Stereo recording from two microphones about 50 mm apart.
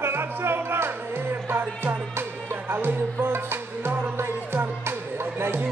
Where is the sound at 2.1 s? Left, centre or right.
Right.